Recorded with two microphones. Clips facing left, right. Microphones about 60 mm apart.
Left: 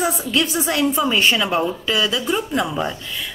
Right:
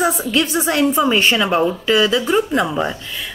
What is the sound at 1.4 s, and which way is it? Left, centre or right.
Speech, centre.